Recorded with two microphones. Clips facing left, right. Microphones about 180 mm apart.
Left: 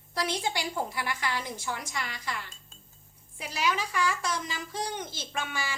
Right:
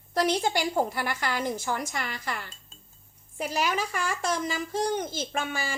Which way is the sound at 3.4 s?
50° right (ahead or behind).